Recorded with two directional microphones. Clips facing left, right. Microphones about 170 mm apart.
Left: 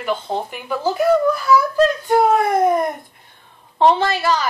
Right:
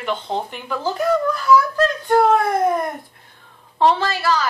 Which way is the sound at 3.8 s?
20° left (ahead or behind).